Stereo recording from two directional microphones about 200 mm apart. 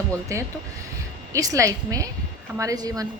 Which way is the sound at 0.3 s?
15° right (ahead or behind).